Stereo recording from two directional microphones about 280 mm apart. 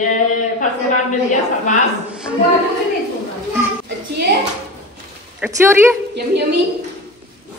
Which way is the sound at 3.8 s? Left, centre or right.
Right.